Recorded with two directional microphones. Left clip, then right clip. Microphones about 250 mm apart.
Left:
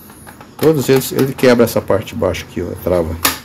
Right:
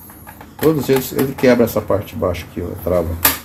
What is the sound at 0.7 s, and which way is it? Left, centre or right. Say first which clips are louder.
Speech: left 3 dB; left.